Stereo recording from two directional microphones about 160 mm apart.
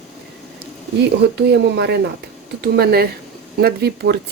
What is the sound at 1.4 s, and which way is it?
A woman's voice, 90° right.